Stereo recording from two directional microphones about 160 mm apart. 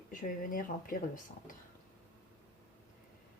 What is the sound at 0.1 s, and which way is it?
Speech, 55° left (ahead or behind).